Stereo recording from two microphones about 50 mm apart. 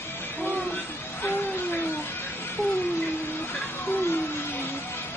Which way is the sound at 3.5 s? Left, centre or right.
Left.